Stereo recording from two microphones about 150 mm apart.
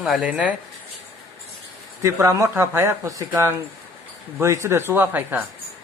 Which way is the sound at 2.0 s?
20° right (ahead or behind).